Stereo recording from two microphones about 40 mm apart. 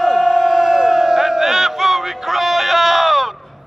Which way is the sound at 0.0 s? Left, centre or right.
Centre.